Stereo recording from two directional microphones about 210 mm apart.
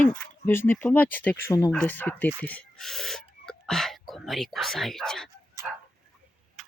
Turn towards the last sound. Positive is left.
turn(degrees=0)  # may be behind; listen again after turning